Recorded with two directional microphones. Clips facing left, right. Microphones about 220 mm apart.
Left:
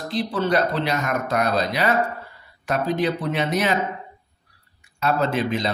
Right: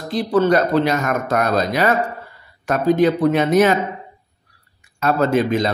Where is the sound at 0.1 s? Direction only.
45° right (ahead or behind).